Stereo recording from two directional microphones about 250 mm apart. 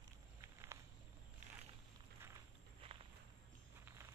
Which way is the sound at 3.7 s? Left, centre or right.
Centre.